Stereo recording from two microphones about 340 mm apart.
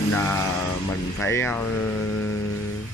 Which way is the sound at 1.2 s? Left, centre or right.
Centre.